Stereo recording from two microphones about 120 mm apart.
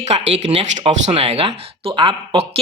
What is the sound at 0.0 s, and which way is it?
Speech, 65° right (ahead or behind).